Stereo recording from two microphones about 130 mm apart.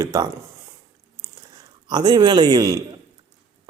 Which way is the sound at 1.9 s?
35° right (ahead or behind).